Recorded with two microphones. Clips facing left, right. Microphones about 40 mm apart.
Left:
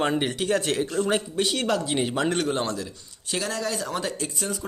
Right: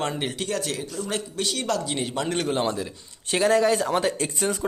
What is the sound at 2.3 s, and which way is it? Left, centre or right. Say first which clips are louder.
Speech: right 1 dB; centre.